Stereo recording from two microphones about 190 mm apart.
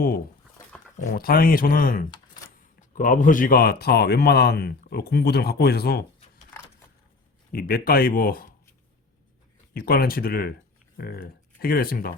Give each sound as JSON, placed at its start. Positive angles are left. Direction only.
{"t": 1.1, "sound": "speech", "side_deg": 50}
{"t": 7.5, "sound": "speech", "side_deg": 50}
{"t": 9.7, "sound": "speech", "side_deg": 50}